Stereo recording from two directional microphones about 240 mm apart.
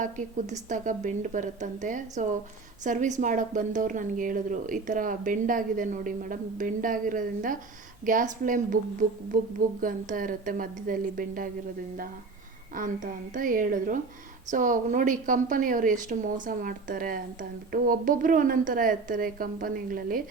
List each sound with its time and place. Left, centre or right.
0.0 s speech: right
12.7 s speech: right